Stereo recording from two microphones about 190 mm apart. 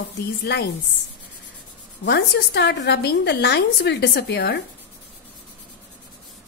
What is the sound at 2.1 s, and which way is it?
A woman's voice, 60° left (ahead or behind).